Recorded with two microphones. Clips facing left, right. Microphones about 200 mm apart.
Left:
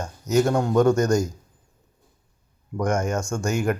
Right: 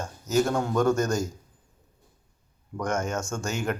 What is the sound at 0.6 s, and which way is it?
Speech, 15° left (ahead or behind).